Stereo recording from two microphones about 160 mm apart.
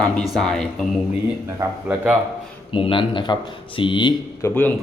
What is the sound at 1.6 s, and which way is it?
Speech, 10° right (ahead or behind).